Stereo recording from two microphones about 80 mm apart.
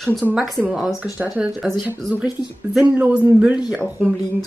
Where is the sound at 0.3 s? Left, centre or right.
Centre.